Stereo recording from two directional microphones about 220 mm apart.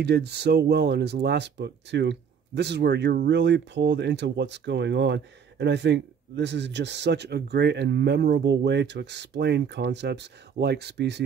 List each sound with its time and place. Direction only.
0.0 s speech: 50° right (ahead or behind)